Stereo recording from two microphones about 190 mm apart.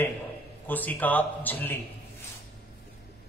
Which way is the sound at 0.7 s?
10° left (ahead or behind).